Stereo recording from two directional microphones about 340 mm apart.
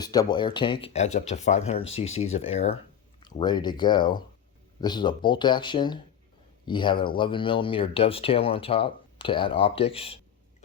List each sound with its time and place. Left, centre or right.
0.0 s speech: centre